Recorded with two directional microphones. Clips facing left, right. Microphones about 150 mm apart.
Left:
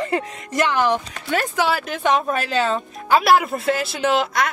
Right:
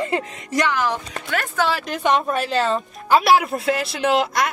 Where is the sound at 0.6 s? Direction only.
25° left (ahead or behind).